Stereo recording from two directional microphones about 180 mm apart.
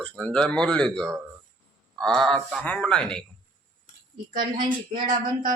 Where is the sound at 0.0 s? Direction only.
5° left (ahead or behind).